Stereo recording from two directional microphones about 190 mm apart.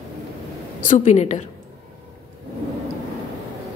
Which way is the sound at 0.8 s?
40° left (ahead or behind).